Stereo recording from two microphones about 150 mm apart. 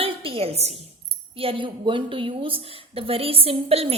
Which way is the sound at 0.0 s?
35° right (ahead or behind).